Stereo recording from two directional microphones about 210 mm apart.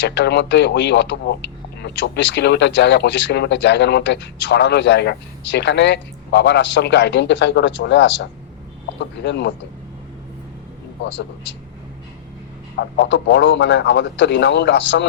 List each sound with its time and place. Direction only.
0.0 s speech: 55° left (ahead or behind)
11.0 s speech: 60° left (ahead or behind)
12.7 s speech: 55° left (ahead or behind)